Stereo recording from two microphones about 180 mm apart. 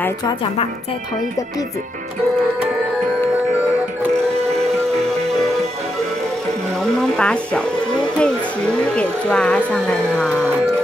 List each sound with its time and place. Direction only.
5.1 s music: centre (ahead or behind)
6.8 s music: 5° left (ahead or behind)
8.2 s speech: 5° left (ahead or behind)